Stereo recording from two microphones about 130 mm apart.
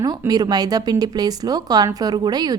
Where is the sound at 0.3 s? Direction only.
30° right (ahead or behind).